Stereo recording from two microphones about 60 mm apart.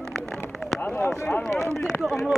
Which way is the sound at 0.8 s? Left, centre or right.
Left.